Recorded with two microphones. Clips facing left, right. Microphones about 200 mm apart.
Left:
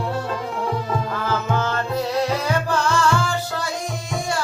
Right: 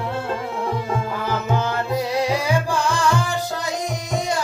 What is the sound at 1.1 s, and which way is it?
Music, 15° right (ahead or behind).